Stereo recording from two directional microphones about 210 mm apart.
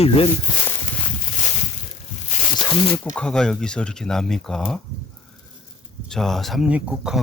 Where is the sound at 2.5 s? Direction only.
20° left (ahead or behind).